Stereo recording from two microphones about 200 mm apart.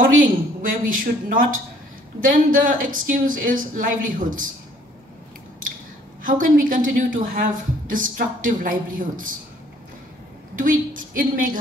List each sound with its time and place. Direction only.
0.2 s a woman's voice: 45° right (ahead or behind)
6.2 s a woman's voice: 40° right (ahead or behind)
10.5 s a woman's voice: 45° right (ahead or behind)